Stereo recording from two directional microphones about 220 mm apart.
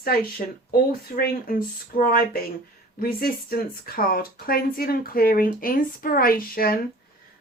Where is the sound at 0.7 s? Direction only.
40° left (ahead or behind).